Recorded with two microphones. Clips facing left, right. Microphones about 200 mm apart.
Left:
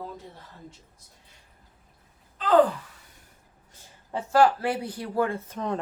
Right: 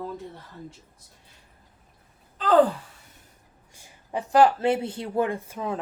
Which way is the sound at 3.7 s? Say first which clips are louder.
Right 2 dB; 15° right (ahead or behind).